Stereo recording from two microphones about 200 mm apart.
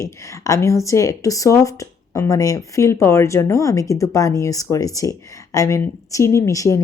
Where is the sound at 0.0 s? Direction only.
15° left (ahead or behind).